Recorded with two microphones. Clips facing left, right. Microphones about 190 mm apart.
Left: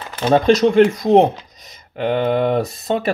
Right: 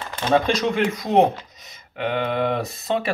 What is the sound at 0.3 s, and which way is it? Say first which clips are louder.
Speech: left 6 dB; 35° left (ahead or behind).